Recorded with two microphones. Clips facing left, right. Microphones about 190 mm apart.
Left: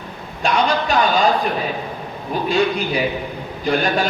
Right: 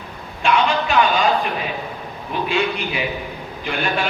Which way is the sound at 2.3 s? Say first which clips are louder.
Left 3 dB; 40° left (ahead or behind).